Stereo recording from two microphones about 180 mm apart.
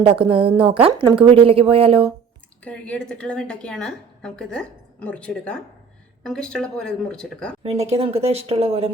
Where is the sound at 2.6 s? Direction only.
5° left (ahead or behind).